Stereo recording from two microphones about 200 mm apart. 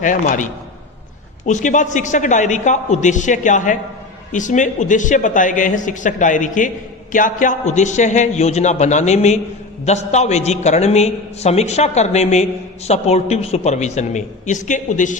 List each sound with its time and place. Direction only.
0.0 s a man's voice: 40° left (ahead or behind)
1.5 s a man's voice: 40° left (ahead or behind)